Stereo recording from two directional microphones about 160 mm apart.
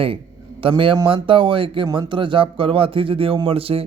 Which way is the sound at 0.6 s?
30° right (ahead or behind).